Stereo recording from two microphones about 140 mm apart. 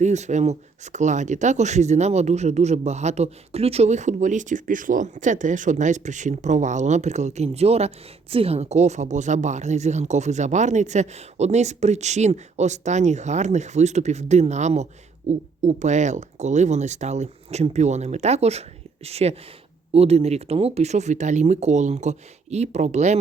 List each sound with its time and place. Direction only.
0.0 s speech: 55° right (ahead or behind)